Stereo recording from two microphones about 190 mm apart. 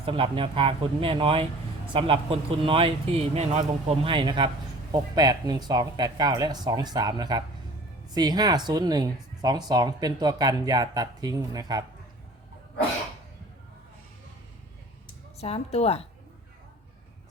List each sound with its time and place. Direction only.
0.0 s speech: 30° right (ahead or behind)
15.0 s speech: 35° left (ahead or behind)